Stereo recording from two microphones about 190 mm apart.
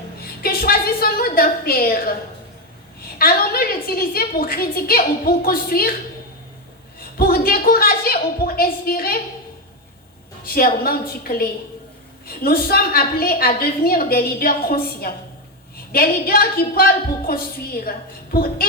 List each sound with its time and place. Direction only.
0.4 s a woman's voice: 50° left (ahead or behind)
3.2 s a woman's voice: 50° left (ahead or behind)
7.2 s a woman's voice: 50° left (ahead or behind)
10.4 s a woman's voice: 50° left (ahead or behind)